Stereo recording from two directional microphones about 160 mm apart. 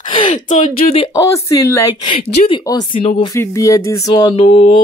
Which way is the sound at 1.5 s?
20° left (ahead or behind).